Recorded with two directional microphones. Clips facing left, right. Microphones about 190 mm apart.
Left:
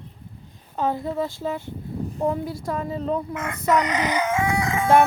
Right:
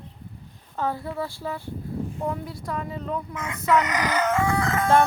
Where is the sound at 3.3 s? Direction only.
60° left (ahead or behind).